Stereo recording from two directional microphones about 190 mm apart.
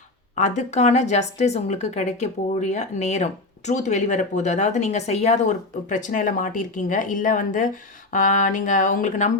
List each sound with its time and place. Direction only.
0.3 s speech: 40° left (ahead or behind)